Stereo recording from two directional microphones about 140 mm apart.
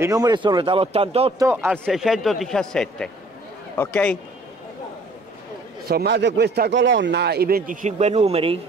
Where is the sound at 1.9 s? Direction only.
Centre (ahead or behind).